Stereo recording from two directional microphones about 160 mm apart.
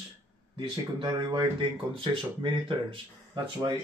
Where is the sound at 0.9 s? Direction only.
30° right (ahead or behind).